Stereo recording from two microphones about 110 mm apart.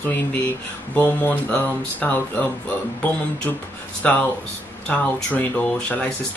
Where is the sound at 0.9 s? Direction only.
15° left (ahead or behind).